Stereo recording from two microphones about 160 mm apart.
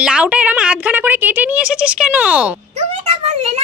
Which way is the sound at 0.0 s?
5° right (ahead or behind).